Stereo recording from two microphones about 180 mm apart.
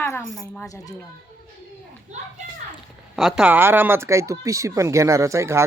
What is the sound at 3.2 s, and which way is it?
Speech, centre (ahead or behind).